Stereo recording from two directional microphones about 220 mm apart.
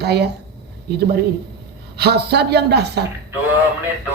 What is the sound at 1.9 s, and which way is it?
Speech, 50° right (ahead or behind).